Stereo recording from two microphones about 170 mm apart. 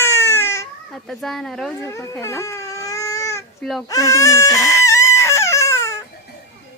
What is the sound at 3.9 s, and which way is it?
Baby cry, 20° left (ahead or behind).